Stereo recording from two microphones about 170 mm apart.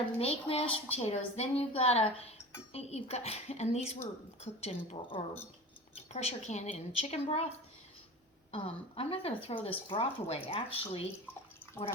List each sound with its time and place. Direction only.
0.2 s speech: 35° left (ahead or behind)
8.5 s speech: 35° left (ahead or behind)
11.8 s speech: 10° left (ahead or behind)